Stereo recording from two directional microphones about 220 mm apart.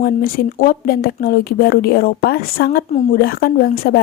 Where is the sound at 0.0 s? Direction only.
40° left (ahead or behind).